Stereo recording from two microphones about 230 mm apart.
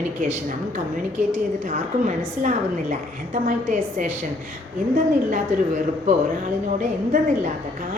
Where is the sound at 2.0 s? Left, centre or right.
Right.